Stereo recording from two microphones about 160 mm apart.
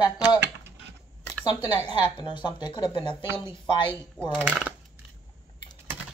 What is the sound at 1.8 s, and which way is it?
Speech, 30° left (ahead or behind).